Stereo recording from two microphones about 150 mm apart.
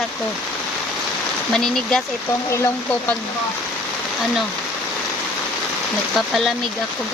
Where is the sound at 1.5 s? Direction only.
5° left (ahead or behind).